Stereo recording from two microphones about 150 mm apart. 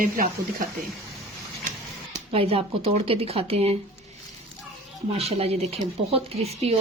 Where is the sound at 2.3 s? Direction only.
40° right (ahead or behind).